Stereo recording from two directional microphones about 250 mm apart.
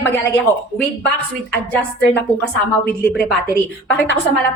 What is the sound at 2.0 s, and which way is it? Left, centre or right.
Speech, left.